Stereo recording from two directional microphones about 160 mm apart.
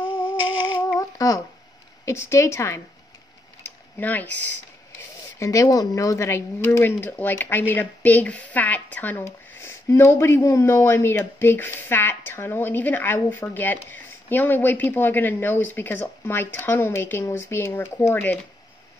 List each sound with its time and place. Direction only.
0.9 s humming: 20° left (ahead or behind)
2.0 s speech: 15° left (ahead or behind)
3.6 s a sound: 10° left (ahead or behind)
5.4 s speech: 20° left (ahead or behind)